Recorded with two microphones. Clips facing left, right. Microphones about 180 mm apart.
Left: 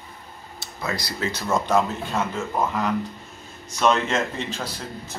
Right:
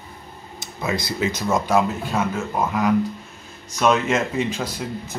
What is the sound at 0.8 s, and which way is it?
Speech, 20° right (ahead or behind).